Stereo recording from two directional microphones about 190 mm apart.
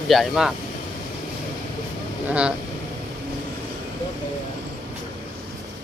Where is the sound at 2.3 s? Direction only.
5° right (ahead or behind).